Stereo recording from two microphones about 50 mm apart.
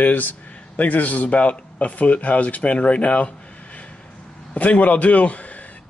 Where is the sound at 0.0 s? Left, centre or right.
Left.